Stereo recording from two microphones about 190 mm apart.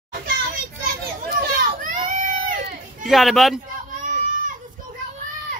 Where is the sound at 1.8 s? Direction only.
40° right (ahead or behind).